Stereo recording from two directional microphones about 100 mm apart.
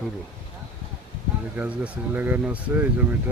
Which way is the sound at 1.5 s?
15° right (ahead or behind).